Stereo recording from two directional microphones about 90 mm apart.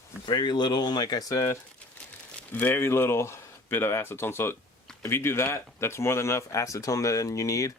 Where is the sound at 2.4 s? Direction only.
20° left (ahead or behind).